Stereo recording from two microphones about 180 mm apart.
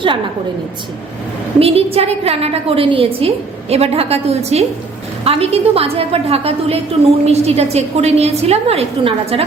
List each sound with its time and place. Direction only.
1.5 s a woman's voice: 35° right (ahead or behind)